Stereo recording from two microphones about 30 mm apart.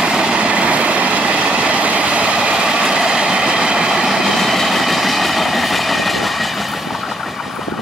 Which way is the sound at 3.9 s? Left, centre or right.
Centre.